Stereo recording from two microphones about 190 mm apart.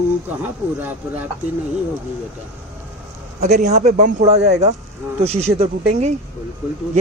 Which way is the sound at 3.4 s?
35° right (ahead or behind).